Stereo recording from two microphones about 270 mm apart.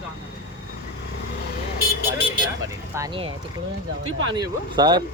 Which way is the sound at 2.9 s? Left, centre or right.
Centre.